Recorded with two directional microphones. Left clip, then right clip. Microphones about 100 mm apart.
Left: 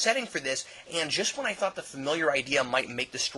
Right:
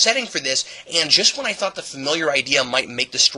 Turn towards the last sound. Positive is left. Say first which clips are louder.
# right 8 dB
turn(degrees=-20)  # may be behind; listen again after turning